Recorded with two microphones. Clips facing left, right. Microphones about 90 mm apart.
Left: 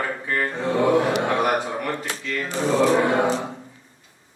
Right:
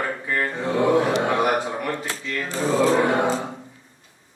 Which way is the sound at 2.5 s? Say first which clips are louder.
Even; 20° left (ahead or behind).